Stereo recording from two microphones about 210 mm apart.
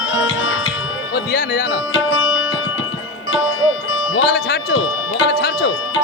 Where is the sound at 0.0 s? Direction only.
65° left (ahead or behind).